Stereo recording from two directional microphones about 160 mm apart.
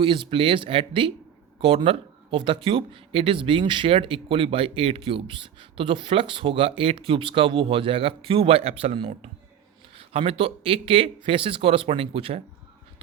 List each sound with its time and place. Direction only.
0.0 s speech: 35° right (ahead or behind)